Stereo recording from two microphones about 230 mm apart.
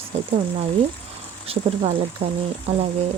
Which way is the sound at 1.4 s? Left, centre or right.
Right.